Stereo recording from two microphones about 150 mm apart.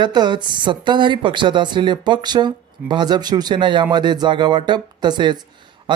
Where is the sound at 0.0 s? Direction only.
30° right (ahead or behind).